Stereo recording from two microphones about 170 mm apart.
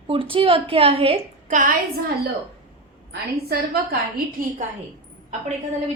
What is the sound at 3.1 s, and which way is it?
A woman's voice, 65° right (ahead or behind).